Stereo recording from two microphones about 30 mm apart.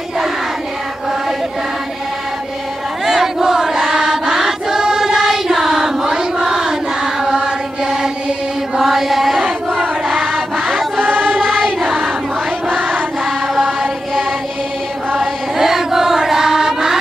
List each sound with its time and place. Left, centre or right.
3.1 s choir: centre
5.5 s child singing: centre
8.8 s chant: centre
9.4 s a sound: centre
10.2 s a sound: centre
11.4 s choir: centre
15.1 s chant: centre